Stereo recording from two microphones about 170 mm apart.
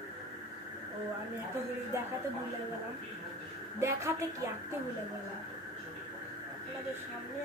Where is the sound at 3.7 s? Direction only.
15° right (ahead or behind).